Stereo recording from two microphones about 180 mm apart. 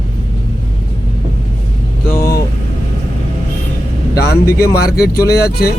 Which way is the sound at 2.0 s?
15° left (ahead or behind).